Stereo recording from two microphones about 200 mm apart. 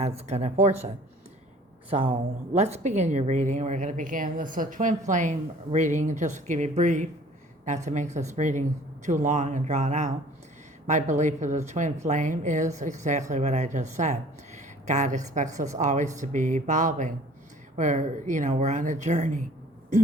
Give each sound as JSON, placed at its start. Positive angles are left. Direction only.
{"t": 0.0, "sound": "a woman's voice", "side_deg": -30}
{"t": 1.9, "sound": "a woman's voice", "side_deg": -30}